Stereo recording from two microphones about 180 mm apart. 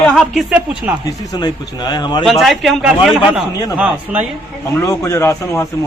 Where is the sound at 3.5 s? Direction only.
20° left (ahead or behind).